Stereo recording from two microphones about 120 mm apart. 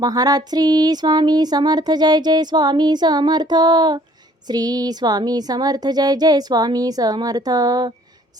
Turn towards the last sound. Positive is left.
turn(degrees=-30)  # may be behind; listen again after turning